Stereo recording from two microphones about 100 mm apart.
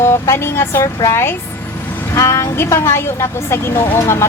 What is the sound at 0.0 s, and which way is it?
A woman's voice, 25° left (ahead or behind).